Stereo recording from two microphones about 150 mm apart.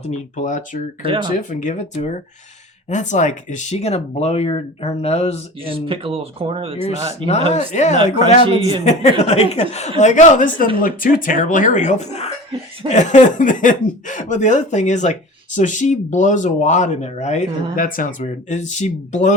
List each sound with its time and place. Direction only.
0.0 s speech: 50° left (ahead or behind)
1.0 s speech: 35° right (ahead or behind)
1.3 s speech: 60° left (ahead or behind)
5.6 s speech: 35° right (ahead or behind)
7.5 s speech: 50° left (ahead or behind)
8.4 s speech: 35° right (ahead or behind)
8.8 s speech: 50° left (ahead or behind)